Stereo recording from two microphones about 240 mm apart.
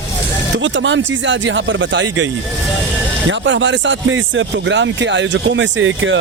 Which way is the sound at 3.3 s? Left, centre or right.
Right.